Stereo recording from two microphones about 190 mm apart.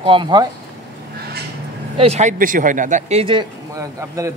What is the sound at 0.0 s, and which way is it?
Speech, 25° right (ahead or behind).